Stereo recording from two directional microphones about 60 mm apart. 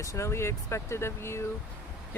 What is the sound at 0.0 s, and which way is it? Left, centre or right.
Speech, left.